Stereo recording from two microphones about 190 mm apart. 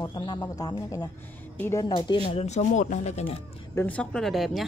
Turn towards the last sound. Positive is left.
turn(degrees=0)  # may be behind; listen again after turning